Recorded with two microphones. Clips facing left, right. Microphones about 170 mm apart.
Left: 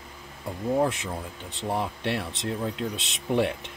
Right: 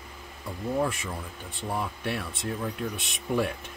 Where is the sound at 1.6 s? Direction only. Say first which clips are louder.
Left 3 dB; 25° left (ahead or behind).